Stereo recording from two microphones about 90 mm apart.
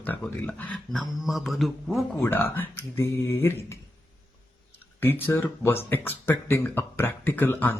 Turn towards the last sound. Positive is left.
turn(degrees=25)  # may be behind; listen again after turning